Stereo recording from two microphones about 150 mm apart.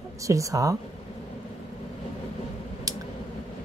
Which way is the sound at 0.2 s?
20° right (ahead or behind).